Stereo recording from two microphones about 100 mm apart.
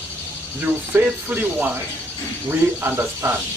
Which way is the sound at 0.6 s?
20° right (ahead or behind).